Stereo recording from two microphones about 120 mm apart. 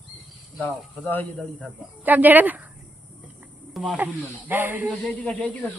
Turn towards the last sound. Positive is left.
turn(degrees=10)  # may be behind; listen again after turning